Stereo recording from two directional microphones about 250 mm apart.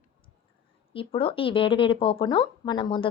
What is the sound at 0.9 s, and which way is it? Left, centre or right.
A woman's voice, left.